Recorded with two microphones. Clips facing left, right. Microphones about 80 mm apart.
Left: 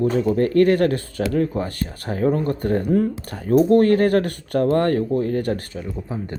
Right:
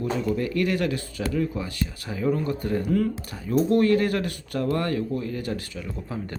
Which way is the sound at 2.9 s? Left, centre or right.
Left.